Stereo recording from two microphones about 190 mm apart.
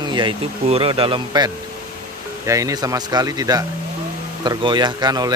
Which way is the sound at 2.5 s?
15° right (ahead or behind).